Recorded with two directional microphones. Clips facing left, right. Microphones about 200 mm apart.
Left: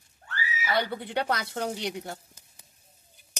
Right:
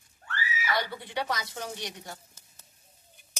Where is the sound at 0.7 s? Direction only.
60° left (ahead or behind).